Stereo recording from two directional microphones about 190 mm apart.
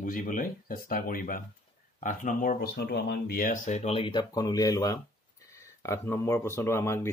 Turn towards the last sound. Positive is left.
turn(degrees=15)  # may be behind; listen again after turning